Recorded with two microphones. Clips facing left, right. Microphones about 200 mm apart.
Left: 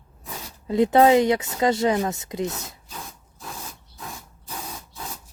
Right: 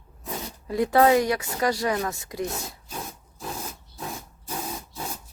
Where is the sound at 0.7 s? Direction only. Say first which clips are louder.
Left 3 dB; 20° left (ahead or behind).